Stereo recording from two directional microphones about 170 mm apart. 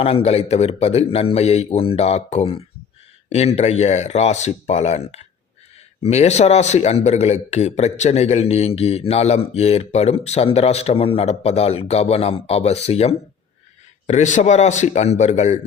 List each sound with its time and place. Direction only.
0.0 s a man's voice: 35° left (ahead or behind)